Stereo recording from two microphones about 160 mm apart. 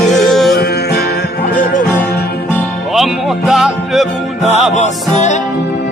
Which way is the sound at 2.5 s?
Centre (ahead or behind).